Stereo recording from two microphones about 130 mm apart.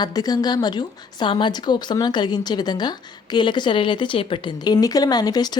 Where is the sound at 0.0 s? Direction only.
30° left (ahead or behind).